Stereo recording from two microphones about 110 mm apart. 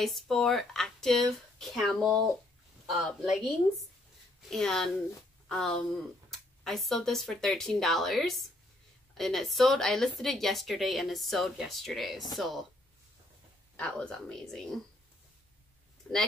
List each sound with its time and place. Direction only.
0.0 s speech: 5° left (ahead or behind)
13.7 s speech: 10° left (ahead or behind)